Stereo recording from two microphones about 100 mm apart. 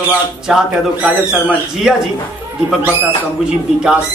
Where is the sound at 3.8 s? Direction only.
10° right (ahead or behind).